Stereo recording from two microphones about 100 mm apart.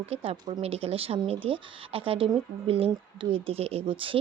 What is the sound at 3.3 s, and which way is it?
Speech, 80° right.